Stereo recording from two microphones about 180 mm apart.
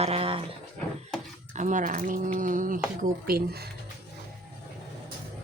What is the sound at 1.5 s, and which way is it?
Speech, 45° right (ahead or behind).